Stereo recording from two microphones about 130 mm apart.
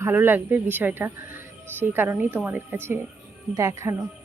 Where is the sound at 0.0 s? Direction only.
15° right (ahead or behind).